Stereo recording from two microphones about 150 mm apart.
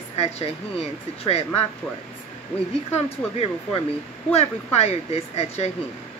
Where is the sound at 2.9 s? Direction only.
40° left (ahead or behind).